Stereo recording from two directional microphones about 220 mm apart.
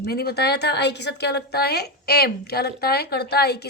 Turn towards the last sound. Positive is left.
turn(degrees=45)  # may be behind; listen again after turning